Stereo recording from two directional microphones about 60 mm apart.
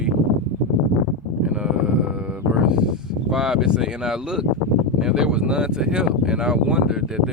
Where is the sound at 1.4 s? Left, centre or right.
Centre.